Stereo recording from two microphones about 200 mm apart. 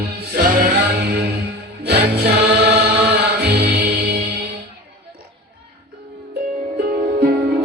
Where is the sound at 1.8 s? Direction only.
50° right (ahead or behind).